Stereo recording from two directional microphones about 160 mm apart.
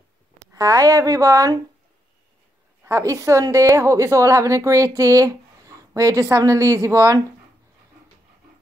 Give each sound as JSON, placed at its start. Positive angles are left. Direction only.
{"t": 0.5, "sound": "a woman's voice", "side_deg": -20}
{"t": 2.8, "sound": "a woman's voice", "side_deg": -20}